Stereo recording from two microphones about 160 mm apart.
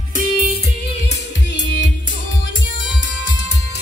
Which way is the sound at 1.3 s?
90° left.